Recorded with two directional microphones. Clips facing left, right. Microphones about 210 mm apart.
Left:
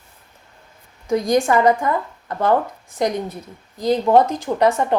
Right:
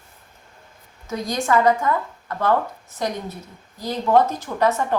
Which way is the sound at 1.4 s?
20° left (ahead or behind).